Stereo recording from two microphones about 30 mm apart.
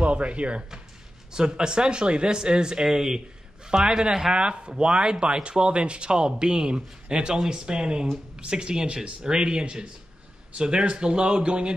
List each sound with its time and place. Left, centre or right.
0.0 s speech: right
1.3 s speech: right
8.8 s speech: right
9.2 s speech: right